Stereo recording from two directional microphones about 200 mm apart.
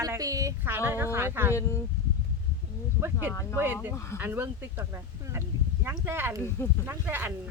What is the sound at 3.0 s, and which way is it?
Speech, 10° right (ahead or behind).